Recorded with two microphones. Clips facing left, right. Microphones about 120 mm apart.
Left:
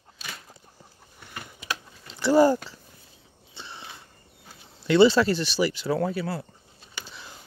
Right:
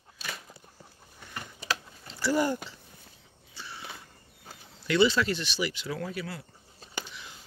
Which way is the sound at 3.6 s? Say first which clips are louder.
Left 2 dB; 25° left (ahead or behind).